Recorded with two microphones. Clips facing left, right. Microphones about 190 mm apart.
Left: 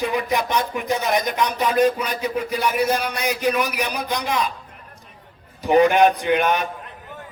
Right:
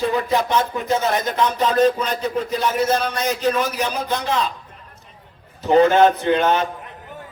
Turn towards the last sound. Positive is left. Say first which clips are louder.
# right 2 dB
turn(degrees=15)  # may be behind; listen again after turning